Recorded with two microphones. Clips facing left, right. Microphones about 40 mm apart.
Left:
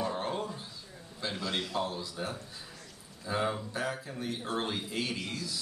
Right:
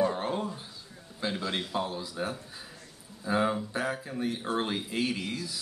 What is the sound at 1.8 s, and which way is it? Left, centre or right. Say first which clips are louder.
A man's voice: right 2 dB; right.